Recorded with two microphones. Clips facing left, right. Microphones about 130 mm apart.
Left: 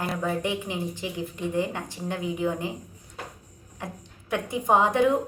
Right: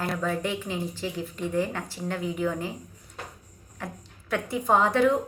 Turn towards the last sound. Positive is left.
turn(degrees=20)  # may be behind; listen again after turning